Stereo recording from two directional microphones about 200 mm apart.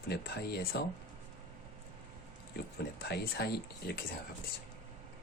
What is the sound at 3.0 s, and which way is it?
Speech, 55° left (ahead or behind).